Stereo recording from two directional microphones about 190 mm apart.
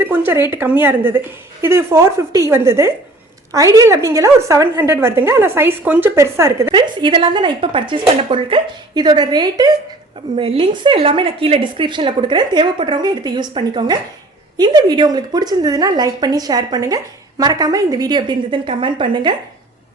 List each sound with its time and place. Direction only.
0.0 s a woman's voice: 10° right (ahead or behind)
6.7 s a woman's voice: 25° right (ahead or behind)